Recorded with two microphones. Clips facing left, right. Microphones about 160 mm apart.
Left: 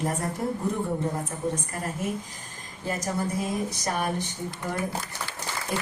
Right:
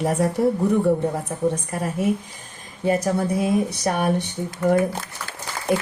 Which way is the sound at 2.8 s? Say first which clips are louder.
Right 8 dB; 65° right (ahead or behind).